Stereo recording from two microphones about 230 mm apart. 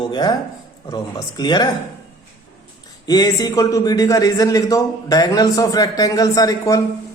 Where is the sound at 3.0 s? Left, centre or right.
Centre.